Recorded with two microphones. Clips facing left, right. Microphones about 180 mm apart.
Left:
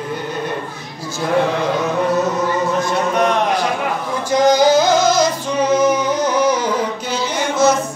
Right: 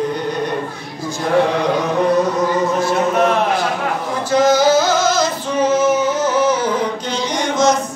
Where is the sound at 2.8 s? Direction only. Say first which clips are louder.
Right 2 dB; 5° right (ahead or behind).